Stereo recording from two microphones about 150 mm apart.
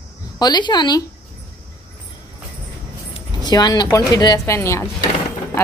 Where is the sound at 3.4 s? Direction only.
25° left (ahead or behind).